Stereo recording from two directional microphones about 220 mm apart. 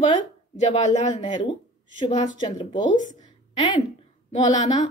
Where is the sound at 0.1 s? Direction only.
30° left (ahead or behind).